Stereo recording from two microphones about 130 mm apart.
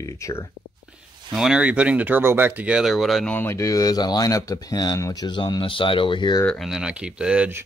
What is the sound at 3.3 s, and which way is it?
Speech, 20° left (ahead or behind).